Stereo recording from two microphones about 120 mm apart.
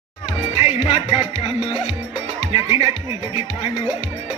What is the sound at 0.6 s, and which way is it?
Music, 60° left (ahead or behind).